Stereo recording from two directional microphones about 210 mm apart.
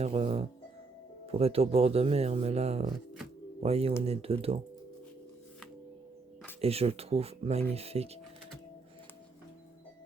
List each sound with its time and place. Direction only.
0.0 s speech: 30° right (ahead or behind)
6.6 s speech: 30° right (ahead or behind)